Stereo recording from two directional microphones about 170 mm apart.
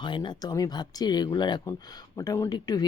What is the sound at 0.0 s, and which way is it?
Speech, 25° left (ahead or behind).